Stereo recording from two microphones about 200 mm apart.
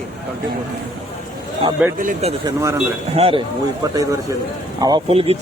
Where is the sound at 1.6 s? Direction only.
30° right (ahead or behind).